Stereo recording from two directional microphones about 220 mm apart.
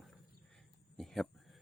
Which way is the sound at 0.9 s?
Centre (ahead or behind).